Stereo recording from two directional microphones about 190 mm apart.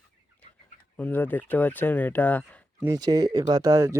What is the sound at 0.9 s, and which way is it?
Speech, 10° left (ahead or behind).